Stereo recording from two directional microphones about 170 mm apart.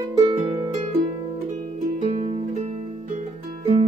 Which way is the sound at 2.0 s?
40° right (ahead or behind).